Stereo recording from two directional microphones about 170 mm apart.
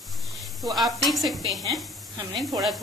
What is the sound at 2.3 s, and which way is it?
Speech, 20° right (ahead or behind).